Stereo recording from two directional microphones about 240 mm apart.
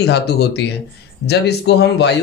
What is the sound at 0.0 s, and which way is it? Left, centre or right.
Speech, left.